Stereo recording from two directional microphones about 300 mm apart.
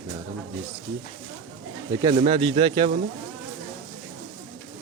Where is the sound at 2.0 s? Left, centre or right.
Centre.